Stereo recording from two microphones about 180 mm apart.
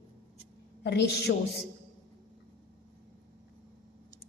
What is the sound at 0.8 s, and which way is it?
Speech, 70° left (ahead or behind).